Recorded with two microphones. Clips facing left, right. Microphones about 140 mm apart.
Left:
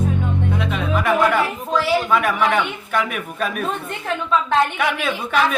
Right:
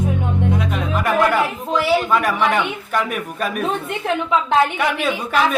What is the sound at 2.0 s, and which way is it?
A man's voice, centre (ahead or behind).